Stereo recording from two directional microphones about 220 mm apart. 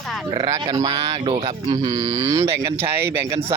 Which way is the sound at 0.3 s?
20° right (ahead or behind).